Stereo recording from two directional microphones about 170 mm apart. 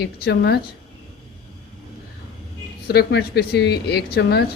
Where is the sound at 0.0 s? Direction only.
70° left (ahead or behind).